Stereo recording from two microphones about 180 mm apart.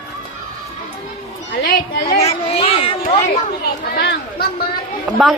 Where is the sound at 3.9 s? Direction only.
60° left (ahead or behind).